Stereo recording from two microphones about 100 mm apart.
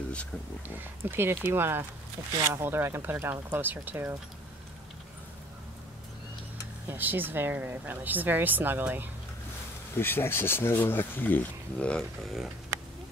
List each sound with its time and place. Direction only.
0.7 s speech: 20° right (ahead or behind)
6.9 s speech: 20° right (ahead or behind)
9.9 s speech: 25° left (ahead or behind)
12.0 s speech: centre (ahead or behind)